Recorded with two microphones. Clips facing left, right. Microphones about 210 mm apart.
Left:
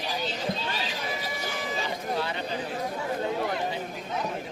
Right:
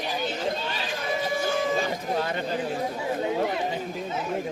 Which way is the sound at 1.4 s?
50° right (ahead or behind).